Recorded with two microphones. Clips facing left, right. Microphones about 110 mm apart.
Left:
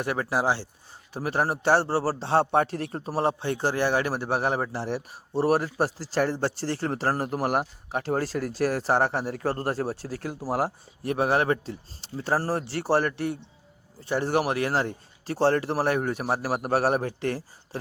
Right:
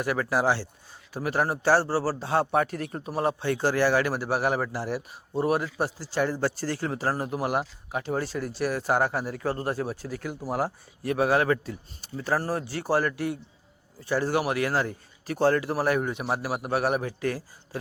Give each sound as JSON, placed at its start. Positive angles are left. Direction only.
{"t": 0.0, "sound": "a man's voice", "side_deg": 30}
{"t": 1.1, "sound": "speech", "side_deg": 30}
{"t": 3.4, "sound": "a man's voice", "side_deg": 20}
{"t": 6.3, "sound": "a man's voice", "side_deg": 30}
{"t": 6.8, "sound": "speech", "side_deg": 45}